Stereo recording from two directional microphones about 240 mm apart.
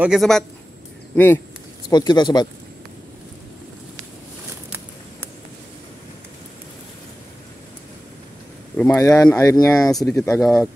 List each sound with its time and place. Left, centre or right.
0.0 s a man's voice: centre
4.6 s a sound: centre
8.7 s speech: centre
9.9 s a man's voice: centre